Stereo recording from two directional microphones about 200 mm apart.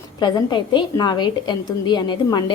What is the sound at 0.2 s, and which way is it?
A woman's voice, 20° left (ahead or behind).